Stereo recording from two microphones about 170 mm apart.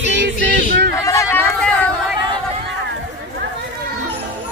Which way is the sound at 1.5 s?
5° left (ahead or behind).